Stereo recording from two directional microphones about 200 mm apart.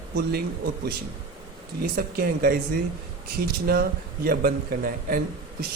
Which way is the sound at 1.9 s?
50° right (ahead or behind).